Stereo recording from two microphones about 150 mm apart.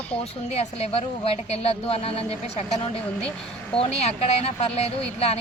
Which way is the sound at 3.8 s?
45° left (ahead or behind).